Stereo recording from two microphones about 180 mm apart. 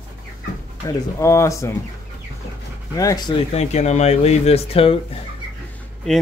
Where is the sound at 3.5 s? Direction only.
40° left (ahead or behind).